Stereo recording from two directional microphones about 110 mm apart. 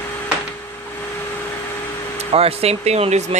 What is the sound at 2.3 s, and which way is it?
Speech, 65° right (ahead or behind).